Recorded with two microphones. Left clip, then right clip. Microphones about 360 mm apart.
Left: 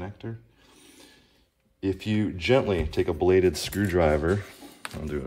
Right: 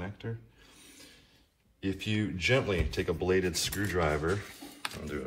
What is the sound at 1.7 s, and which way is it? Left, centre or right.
Speech, centre.